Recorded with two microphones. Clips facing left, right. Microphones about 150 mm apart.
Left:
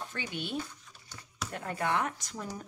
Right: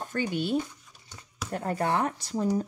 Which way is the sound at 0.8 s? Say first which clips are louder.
Right 1 dB; 10° right (ahead or behind).